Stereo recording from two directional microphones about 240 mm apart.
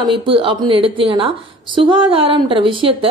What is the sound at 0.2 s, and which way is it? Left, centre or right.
A woman's voice, right.